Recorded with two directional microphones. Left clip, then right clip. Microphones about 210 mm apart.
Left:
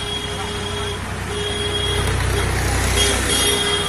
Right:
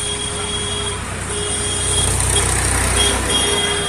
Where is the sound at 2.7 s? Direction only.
30° right (ahead or behind).